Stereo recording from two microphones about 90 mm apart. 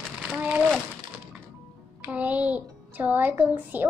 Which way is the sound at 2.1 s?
15° right (ahead or behind).